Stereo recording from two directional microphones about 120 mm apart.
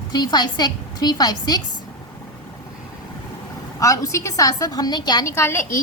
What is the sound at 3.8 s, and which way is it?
A woman's voice, 25° left (ahead or behind).